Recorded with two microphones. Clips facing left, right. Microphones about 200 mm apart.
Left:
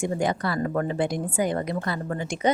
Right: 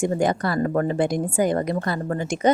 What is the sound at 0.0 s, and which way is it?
A woman's voice, 45° right (ahead or behind).